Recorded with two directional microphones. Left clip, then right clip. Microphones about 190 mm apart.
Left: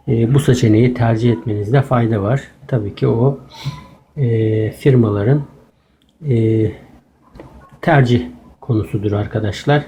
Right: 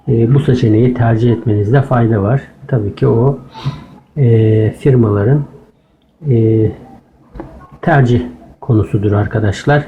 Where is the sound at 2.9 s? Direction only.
Centre (ahead or behind); by 6.7 s 20° left (ahead or behind).